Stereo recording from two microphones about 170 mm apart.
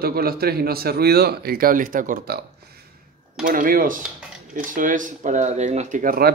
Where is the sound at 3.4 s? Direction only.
55° right (ahead or behind).